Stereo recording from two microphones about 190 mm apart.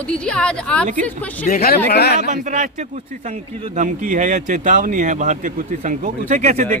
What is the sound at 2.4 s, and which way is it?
Speech, 40° right (ahead or behind).